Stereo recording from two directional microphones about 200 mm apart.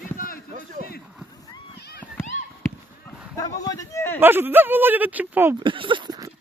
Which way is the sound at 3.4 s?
15° left (ahead or behind).